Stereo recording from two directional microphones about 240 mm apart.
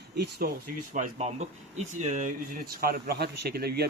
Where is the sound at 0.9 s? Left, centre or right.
Right.